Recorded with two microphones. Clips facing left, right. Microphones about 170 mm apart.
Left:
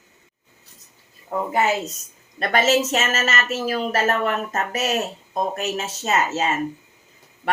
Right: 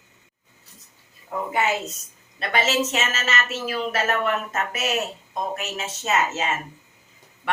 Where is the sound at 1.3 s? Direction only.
40° left (ahead or behind).